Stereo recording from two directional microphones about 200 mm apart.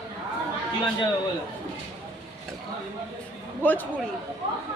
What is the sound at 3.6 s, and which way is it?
Speech, 10° left (ahead or behind).